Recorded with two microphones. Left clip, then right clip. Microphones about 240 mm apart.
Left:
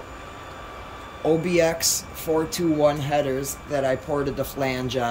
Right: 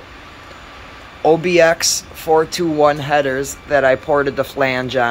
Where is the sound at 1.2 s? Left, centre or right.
Centre.